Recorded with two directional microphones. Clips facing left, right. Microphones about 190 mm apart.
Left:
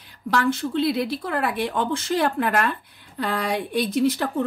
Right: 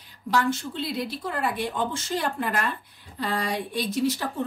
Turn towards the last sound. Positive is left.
turn(degrees=60)  # may be behind; listen again after turning